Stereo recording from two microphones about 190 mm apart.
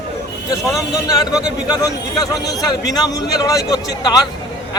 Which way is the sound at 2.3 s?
20° left (ahead or behind).